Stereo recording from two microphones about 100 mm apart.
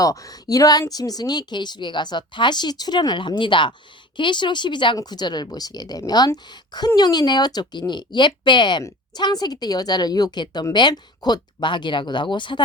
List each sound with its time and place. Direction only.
0.0 s speech: 35° left (ahead or behind); by 12.6 s 50° left (ahead or behind)